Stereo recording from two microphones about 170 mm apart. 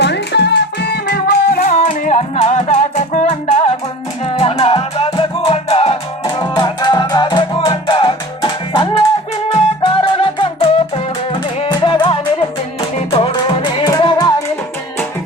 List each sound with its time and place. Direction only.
0.0 s music: 85° left
1.6 s music: 45° left (ahead or behind); by 14.4 s 25° left (ahead or behind)